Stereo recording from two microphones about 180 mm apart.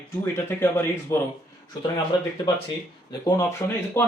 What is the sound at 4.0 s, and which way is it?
Speech, 15° left (ahead or behind).